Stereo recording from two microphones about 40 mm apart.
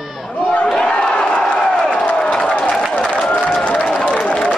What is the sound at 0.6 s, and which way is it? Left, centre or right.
Crowd, centre.